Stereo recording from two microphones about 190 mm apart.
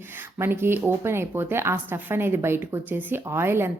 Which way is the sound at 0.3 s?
10° right (ahead or behind).